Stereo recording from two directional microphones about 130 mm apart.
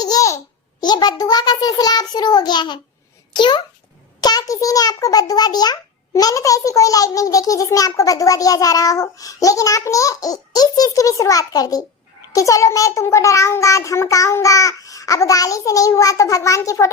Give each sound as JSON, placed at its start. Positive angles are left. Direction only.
{"t": 0.0, "sound": "babbling", "side_deg": 30}
{"t": 0.8, "sound": "child singing", "side_deg": 30}
{"t": 4.2, "sound": "a child's voice", "side_deg": 30}